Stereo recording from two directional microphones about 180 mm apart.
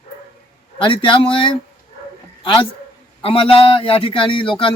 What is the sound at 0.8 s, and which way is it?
Speech, 25° left (ahead or behind).